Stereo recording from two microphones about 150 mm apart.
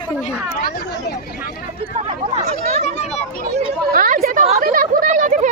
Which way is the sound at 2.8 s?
50° left (ahead or behind).